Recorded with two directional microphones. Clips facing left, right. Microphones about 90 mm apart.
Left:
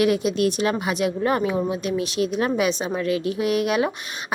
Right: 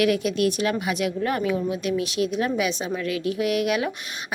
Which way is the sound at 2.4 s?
40° left (ahead or behind).